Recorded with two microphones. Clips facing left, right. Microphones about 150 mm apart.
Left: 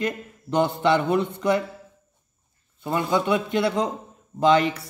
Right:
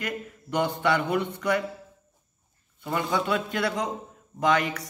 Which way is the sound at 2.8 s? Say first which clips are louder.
Left 4 dB; 25° left (ahead or behind).